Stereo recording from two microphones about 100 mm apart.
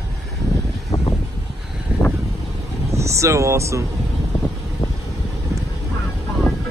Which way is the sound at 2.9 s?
30° right (ahead or behind).